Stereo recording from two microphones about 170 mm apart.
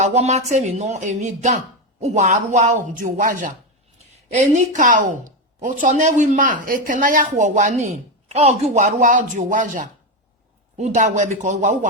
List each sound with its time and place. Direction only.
0.0 s speech: 40° right (ahead or behind)